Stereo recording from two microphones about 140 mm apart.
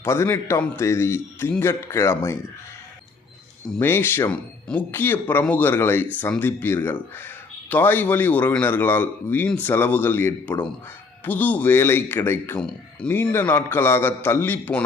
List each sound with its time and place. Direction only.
0.0 s a man's voice: 20° left (ahead or behind)
3.7 s a man's voice: 15° left (ahead or behind)